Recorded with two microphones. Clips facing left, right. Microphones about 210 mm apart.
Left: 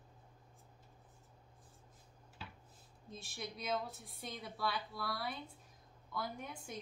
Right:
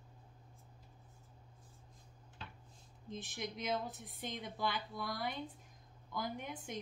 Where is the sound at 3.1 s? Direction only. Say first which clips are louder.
Right 3 dB; 20° right (ahead or behind).